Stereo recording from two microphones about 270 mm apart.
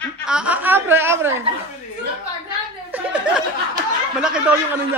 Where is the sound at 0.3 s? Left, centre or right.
Centre.